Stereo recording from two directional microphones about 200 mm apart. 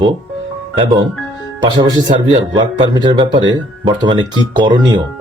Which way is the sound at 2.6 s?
20° right (ahead or behind).